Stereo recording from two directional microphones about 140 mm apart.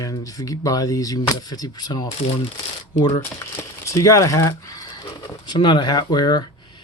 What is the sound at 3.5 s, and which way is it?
Speech, 20° left (ahead or behind).